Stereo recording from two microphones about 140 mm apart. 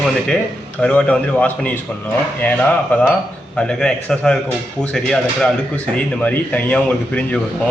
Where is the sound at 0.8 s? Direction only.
10° left (ahead or behind).